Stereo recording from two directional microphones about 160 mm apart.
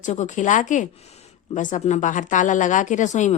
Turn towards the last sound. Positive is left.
turn(degrees=50)  # may be behind; listen again after turning